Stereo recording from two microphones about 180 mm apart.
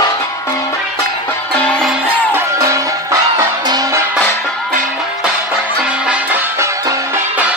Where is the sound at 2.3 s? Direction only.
15° right (ahead or behind).